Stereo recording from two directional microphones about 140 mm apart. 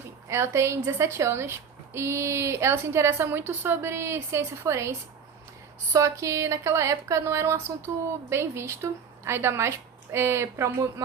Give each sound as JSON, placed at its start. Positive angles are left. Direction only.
{"t": 0.3, "sound": "a woman's voice", "side_deg": -20}